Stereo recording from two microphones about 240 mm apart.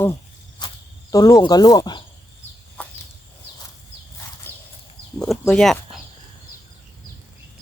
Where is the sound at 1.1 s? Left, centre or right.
Centre.